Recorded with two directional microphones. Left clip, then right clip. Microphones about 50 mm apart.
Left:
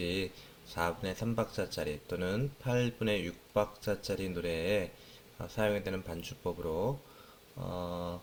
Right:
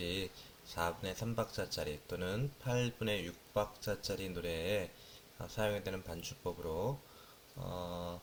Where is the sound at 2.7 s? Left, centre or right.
Left.